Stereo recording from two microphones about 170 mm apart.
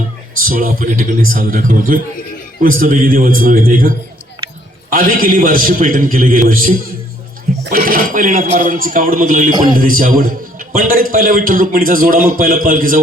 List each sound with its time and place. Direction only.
0.3 s a man's voice: 55° right (ahead or behind)